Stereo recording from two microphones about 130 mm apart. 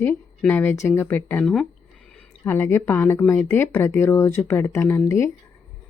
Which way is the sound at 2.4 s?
20° left (ahead or behind).